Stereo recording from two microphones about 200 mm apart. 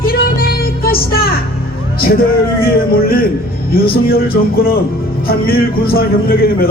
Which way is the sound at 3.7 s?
50° left (ahead or behind).